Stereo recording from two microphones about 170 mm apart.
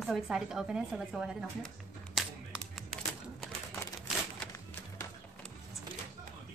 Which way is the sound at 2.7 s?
Centre (ahead or behind).